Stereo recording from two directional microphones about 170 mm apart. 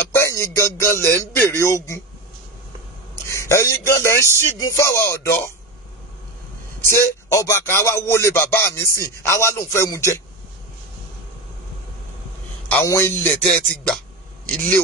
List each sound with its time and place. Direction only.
0.1 s speech: 15° left (ahead or behind)
3.3 s speech: 15° left (ahead or behind)
6.8 s speech: 15° left (ahead or behind)
12.8 s speech: 15° left (ahead or behind)